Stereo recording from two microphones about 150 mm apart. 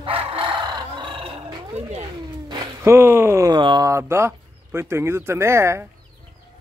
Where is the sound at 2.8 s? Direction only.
15° right (ahead or behind).